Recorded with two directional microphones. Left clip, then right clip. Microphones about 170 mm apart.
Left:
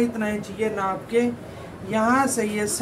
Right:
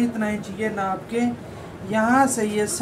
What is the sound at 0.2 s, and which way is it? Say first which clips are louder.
Speech: even; 10° left (ahead or behind).